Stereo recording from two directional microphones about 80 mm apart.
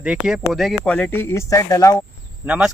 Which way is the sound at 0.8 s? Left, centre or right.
Centre.